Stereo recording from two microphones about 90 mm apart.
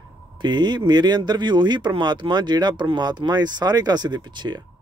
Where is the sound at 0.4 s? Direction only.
55° right (ahead or behind).